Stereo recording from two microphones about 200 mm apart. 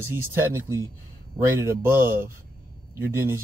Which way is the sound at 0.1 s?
10° right (ahead or behind).